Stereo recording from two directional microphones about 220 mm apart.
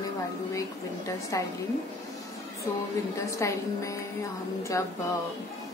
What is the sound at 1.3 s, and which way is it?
Speech, 15° left (ahead or behind).